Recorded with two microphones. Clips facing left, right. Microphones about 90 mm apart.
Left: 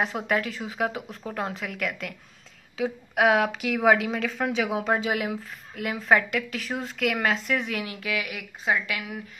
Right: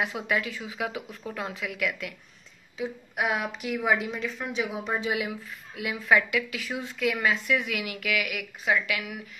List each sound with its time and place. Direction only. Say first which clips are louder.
0.0 s a woman's voice: left 2 dB; 40° left (ahead or behind)
2.8 s a woman's voice: left 7 dB; 75° left (ahead or behind)
4.2 s a woman's voice: left 4 dB; 70° left (ahead or behind)
4.7 s a woman's voice: left 4 dB; 60° left (ahead or behind)
6.9 s a woman's voice: left 1 dB; 60° left (ahead or behind); by 9.2 s 35° left (ahead or behind)